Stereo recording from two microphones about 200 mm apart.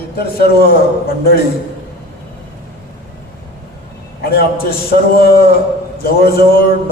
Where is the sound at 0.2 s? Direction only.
50° left (ahead or behind).